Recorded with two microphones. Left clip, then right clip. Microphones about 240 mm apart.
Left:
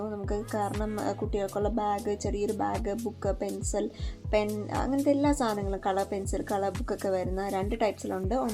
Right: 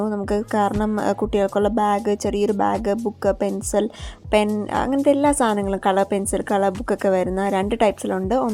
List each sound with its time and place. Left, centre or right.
0.0 s a woman's voice: right